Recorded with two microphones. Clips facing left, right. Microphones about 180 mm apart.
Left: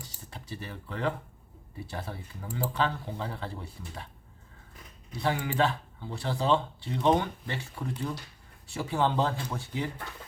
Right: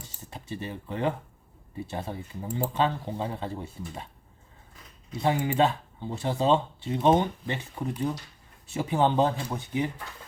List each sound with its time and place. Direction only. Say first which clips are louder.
0.3 s speech: right 5 dB; 20° right (ahead or behind)
5.1 s speech: right 4 dB; 20° right (ahead or behind)